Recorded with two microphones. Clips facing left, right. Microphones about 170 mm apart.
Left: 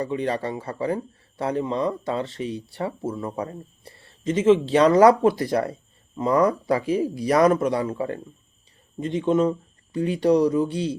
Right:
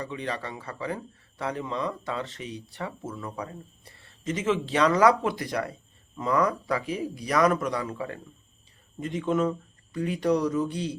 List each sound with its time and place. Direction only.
0.0 s a man's voice: 35° left (ahead or behind)